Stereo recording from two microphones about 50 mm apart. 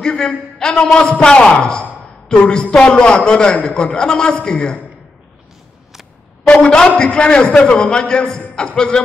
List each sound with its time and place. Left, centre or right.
0.0 s a man's voice: centre
6.4 s a man's voice: centre